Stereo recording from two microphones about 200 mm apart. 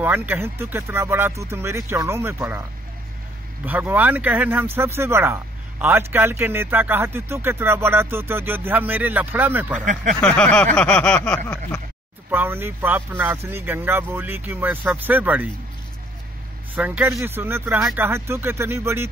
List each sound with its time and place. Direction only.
0.0 s speech: 10° right (ahead or behind)
3.6 s speech: 10° right (ahead or behind)
9.8 s speech: 40° right (ahead or behind)
10.2 s a sound: 5° left (ahead or behind)
12.3 s speech: 10° right (ahead or behind)
16.7 s speech: 10° right (ahead or behind)